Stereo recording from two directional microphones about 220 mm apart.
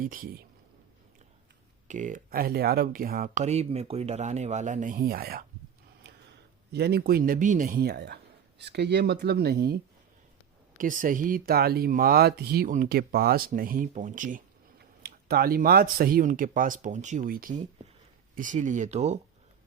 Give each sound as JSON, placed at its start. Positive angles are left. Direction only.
{"t": 0.0, "sound": "speech", "side_deg": -40}
{"t": 1.9, "sound": "speech", "side_deg": -35}
{"t": 6.7, "sound": "speech", "side_deg": -45}
{"t": 10.8, "sound": "speech", "side_deg": -40}